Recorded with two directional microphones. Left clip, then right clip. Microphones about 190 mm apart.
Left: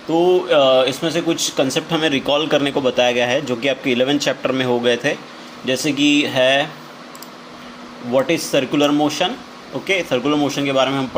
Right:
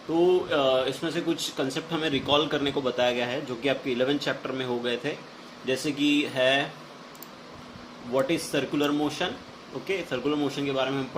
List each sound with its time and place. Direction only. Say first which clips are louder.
0.1 s speech: left 9 dB; 35° left (ahead or behind)
8.1 s speech: left 9 dB; 40° left (ahead or behind)